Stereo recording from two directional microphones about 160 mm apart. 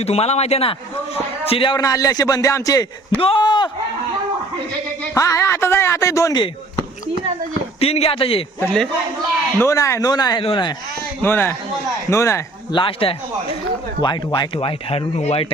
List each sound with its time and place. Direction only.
0.0 s speech: 40° left (ahead or behind)
1.8 s speech: 20° left (ahead or behind)
3.2 s speech: 35° left (ahead or behind)
5.1 s speech: 20° left (ahead or behind)
7.8 s speech: 40° left (ahead or behind)
8.6 s a man's voice: 5° left (ahead or behind)
9.6 s speech: 20° left (ahead or behind)
11.2 s a man's voice: 15° left (ahead or behind)
12.7 s speech: 35° left (ahead or behind)